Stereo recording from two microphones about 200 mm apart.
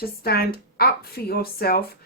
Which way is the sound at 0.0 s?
50° left (ahead or behind).